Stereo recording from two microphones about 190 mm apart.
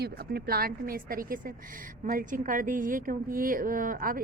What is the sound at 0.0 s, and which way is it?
A woman's voice, 55° right (ahead or behind).